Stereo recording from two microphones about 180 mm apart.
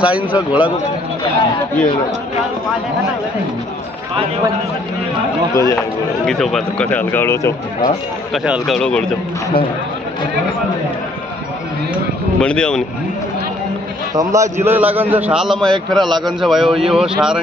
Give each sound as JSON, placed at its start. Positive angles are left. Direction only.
{"t": 0.0, "sound": "speech", "side_deg": -10}
{"t": 5.5, "sound": "speech", "side_deg": 15}
{"t": 5.8, "sound": "speech", "side_deg": 0}
{"t": 8.3, "sound": "a man's voice", "side_deg": 0}
{"t": 12.4, "sound": "a man's voice", "side_deg": 5}
{"t": 14.1, "sound": "a man's voice", "side_deg": -15}